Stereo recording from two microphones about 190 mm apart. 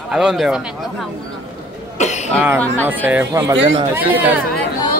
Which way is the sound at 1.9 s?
40° left (ahead or behind).